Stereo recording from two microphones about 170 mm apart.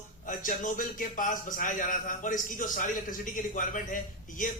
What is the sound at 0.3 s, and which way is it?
A man's voice, 50° left (ahead or behind).